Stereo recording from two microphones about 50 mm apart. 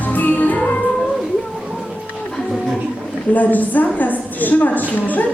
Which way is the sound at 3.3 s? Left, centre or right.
Left.